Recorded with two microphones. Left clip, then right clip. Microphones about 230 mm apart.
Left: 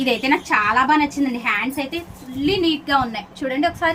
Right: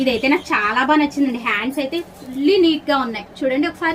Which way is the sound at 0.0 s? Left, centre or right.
Left.